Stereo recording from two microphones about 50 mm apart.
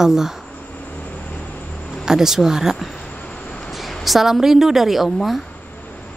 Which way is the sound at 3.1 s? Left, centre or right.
Left.